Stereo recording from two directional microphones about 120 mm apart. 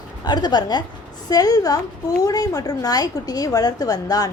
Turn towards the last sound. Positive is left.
turn(degrees=30)  # may be behind; listen again after turning